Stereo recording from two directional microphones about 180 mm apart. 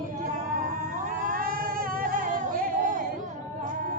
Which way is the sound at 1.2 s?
50° right (ahead or behind).